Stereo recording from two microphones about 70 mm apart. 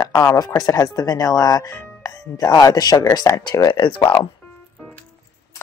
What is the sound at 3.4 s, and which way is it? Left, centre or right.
Speech, left.